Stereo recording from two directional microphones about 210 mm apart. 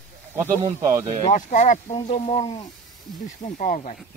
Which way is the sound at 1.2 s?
35° left (ahead or behind).